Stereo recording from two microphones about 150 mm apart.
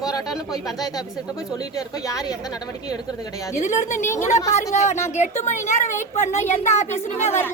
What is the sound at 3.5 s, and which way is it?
A woman's voice, 55° left (ahead or behind).